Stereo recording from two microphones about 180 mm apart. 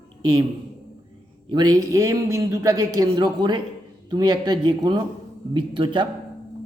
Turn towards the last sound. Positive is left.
turn(degrees=-25)  # may be behind; listen again after turning